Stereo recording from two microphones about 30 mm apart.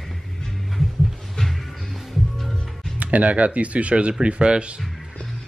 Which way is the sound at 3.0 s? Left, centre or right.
Right.